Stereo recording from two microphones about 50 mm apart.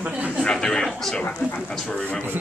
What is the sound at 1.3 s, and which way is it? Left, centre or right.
Speech, left.